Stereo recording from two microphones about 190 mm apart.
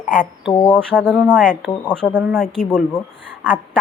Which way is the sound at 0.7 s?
5° left (ahead or behind).